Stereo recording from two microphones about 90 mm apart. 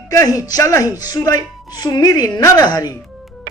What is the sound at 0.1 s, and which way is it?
A woman's voice, 40° left (ahead or behind).